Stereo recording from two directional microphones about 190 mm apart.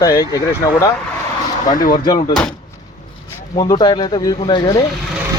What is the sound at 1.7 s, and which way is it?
Speech, 45° left (ahead or behind).